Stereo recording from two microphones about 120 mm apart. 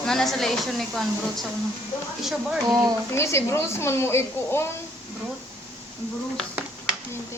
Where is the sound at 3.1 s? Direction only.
20° left (ahead or behind).